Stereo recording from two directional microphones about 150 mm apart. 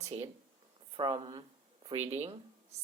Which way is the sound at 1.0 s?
35° right (ahead or behind).